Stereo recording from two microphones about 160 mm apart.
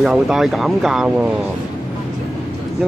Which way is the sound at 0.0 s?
Centre (ahead or behind).